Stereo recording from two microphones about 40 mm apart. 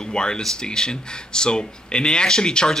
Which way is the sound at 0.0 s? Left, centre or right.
Left.